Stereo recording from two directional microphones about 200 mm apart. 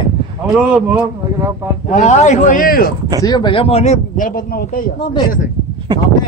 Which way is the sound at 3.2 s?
20° left (ahead or behind).